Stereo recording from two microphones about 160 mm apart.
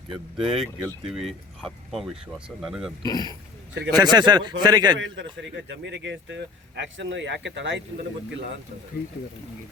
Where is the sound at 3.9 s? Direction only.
25° right (ahead or behind).